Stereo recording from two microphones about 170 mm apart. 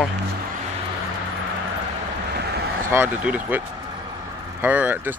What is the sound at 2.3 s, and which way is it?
Vehicle, 70° right (ahead or behind).